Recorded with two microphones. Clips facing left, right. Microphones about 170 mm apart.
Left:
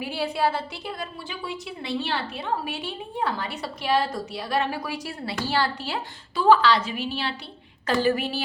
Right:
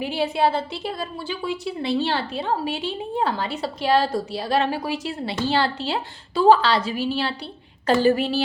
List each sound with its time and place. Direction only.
0.0 s a woman's voice: 20° right (ahead or behind)